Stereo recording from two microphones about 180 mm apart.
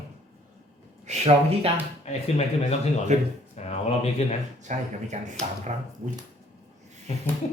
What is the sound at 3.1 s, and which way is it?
Speech, 40° right (ahead or behind).